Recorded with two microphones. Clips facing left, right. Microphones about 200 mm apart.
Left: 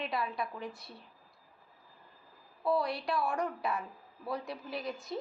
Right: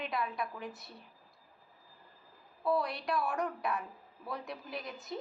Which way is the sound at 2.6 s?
Centre (ahead or behind).